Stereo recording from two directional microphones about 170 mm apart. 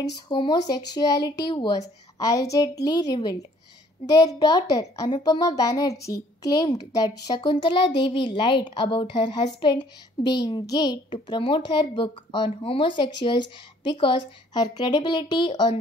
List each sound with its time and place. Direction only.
0.3 s a woman's voice: 25° left (ahead or behind)